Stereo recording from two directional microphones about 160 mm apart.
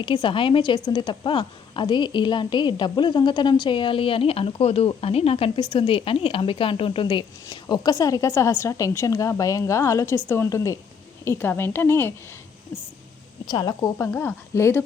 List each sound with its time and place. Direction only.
0.0 s a woman's voice: 30° left (ahead or behind); by 12.1 s 15° left (ahead or behind)
13.5 s speech: 25° left (ahead or behind)
14.1 s speech: 15° left (ahead or behind)